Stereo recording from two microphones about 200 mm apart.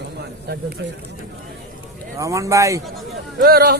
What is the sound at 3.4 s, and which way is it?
Speech, 50° right (ahead or behind).